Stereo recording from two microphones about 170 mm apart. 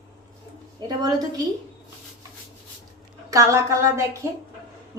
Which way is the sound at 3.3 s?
20° right (ahead or behind).